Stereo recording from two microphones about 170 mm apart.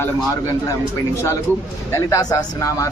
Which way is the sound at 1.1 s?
15° left (ahead or behind).